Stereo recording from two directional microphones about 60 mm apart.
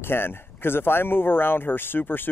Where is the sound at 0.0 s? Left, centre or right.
Left.